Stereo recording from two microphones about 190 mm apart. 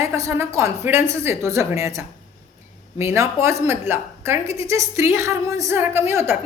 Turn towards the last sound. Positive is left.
turn(degrees=-15)  # may be behind; listen again after turning